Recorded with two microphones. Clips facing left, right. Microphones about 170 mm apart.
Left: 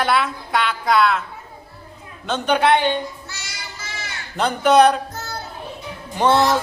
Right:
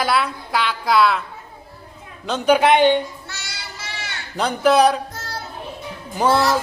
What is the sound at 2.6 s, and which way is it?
Speech, 15° right (ahead or behind).